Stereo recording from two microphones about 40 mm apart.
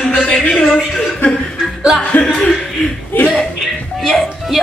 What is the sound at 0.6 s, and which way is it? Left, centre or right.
Speech, centre.